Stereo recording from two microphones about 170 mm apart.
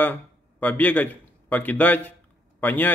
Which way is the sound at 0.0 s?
10° left (ahead or behind).